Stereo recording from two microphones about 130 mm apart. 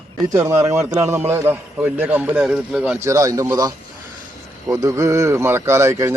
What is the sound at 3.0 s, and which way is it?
A man's voice, 25° right (ahead or behind).